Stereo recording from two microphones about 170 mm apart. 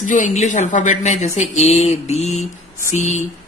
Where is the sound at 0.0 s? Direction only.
45° left (ahead or behind).